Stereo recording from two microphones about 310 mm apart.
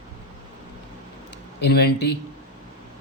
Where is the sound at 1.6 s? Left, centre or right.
Left.